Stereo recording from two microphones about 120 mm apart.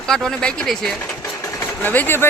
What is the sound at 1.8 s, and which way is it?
Speech, 15° left (ahead or behind).